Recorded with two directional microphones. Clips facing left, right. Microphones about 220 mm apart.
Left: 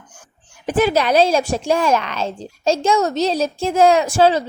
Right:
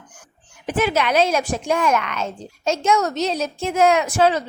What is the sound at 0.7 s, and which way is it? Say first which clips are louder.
Speech: left 4 dB; 35° left (ahead or behind).